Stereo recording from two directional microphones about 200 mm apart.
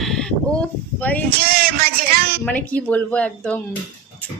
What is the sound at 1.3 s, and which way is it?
A man's voice, 50° right (ahead or behind).